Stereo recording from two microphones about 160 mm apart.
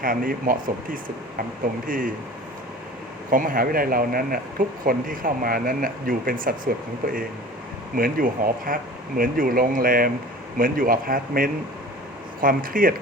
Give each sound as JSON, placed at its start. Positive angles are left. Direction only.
{"t": 0.0, "sound": "speech", "side_deg": -60}
{"t": 3.2, "sound": "speech", "side_deg": -60}